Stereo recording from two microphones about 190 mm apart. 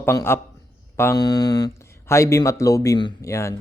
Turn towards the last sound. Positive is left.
turn(degrees=15)  # may be behind; listen again after turning